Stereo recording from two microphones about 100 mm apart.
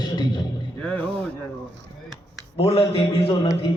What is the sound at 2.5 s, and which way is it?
Speech, 85° left.